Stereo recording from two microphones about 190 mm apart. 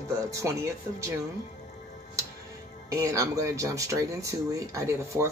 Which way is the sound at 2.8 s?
15° right (ahead or behind).